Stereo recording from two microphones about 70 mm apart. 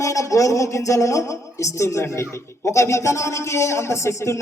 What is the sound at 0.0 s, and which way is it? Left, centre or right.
A man's voice, left.